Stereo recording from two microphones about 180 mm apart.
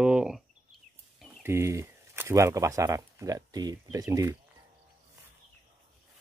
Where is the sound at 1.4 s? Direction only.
15° right (ahead or behind).